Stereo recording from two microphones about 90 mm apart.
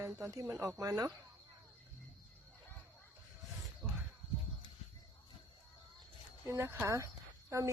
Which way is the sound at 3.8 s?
20° right (ahead or behind).